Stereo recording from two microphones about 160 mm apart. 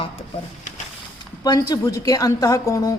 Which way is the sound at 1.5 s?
25° left (ahead or behind).